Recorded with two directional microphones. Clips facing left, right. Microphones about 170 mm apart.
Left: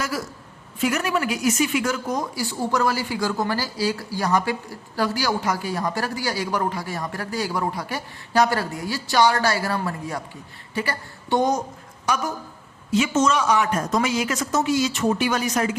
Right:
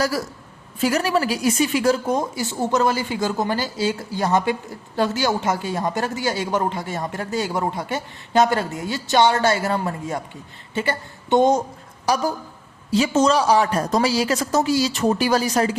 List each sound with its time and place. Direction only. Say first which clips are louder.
0.8 s speech: right 3 dB; 30° right (ahead or behind)
12.0 s speech: right 4 dB; 35° right (ahead or behind)